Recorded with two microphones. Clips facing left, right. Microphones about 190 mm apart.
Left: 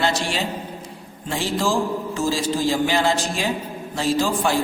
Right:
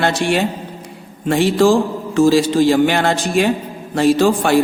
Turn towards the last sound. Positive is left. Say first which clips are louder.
# right 7 dB
turn(degrees=-65)  # may be behind; listen again after turning